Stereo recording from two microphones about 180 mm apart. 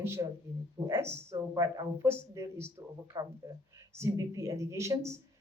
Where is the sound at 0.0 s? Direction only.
15° right (ahead or behind).